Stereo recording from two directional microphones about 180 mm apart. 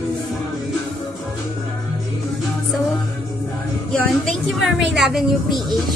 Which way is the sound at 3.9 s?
5° left (ahead or behind).